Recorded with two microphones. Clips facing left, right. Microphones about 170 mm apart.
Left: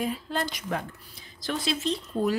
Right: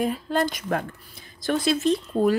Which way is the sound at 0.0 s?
50° right (ahead or behind).